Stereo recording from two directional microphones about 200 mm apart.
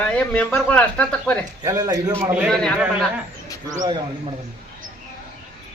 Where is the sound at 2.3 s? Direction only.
Centre (ahead or behind).